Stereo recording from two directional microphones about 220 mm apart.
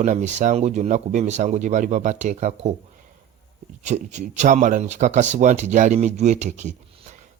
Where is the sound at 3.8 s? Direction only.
30° right (ahead or behind).